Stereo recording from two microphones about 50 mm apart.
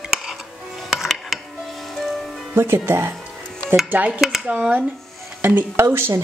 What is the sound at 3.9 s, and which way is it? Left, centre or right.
Speech, right.